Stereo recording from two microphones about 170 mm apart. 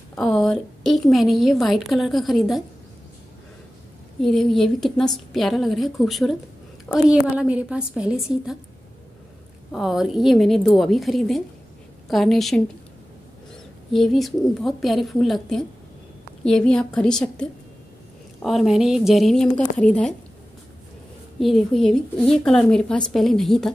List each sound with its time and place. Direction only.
0.1 s a woman's voice: 5° left (ahead or behind)
4.2 s a woman's voice: centre (ahead or behind)
9.7 s a woman's voice: centre (ahead or behind)
13.9 s a woman's voice: centre (ahead or behind)
21.4 s a woman's voice: centre (ahead or behind)